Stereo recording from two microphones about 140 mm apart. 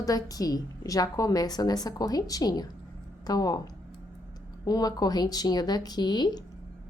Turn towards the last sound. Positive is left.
turn(degrees=30)  # may be behind; listen again after turning